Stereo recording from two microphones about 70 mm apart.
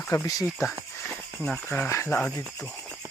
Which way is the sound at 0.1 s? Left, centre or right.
Left.